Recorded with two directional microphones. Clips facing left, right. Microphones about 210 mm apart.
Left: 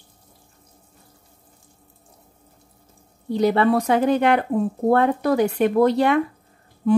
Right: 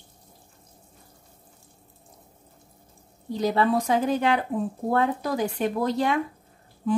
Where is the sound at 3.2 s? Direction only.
65° left (ahead or behind).